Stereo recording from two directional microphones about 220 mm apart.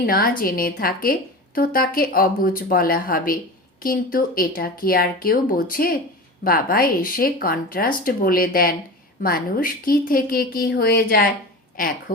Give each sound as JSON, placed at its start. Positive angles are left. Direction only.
{"t": 0.0, "sound": "speech", "side_deg": 40}